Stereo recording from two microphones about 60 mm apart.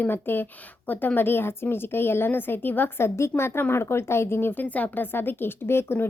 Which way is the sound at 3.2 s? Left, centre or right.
Left.